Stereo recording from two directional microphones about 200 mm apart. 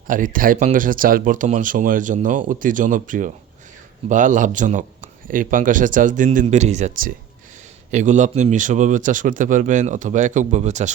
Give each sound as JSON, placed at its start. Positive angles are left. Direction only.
{"t": 0.1, "sound": "a man's voice", "side_deg": -45}